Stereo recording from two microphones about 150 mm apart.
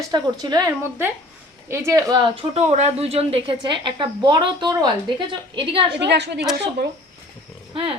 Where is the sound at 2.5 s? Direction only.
50° right (ahead or behind).